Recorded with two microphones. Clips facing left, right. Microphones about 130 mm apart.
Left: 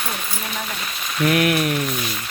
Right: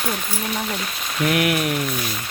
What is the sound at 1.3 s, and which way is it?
Speech, 15° right (ahead or behind).